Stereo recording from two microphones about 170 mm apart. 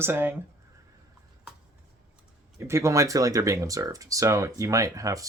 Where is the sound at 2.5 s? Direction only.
15° right (ahead or behind).